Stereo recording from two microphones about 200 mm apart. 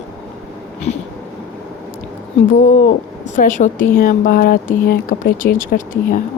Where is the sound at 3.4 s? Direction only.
40° left (ahead or behind).